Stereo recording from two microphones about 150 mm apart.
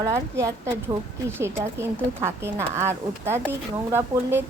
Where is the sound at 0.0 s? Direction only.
20° right (ahead or behind).